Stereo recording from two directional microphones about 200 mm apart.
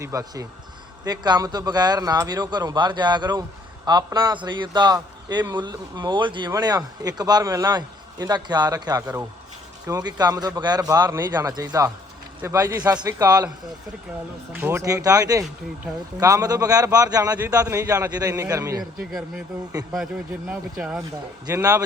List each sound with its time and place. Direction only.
0.0 s a man's voice: 15° right (ahead or behind)
14.5 s a man's voice: 10° right (ahead or behind)
20.5 s speech: 5° right (ahead or behind)
21.4 s a man's voice: 15° right (ahead or behind)